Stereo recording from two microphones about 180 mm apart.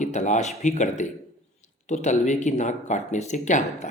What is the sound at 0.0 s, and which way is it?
Speech, 40° left (ahead or behind).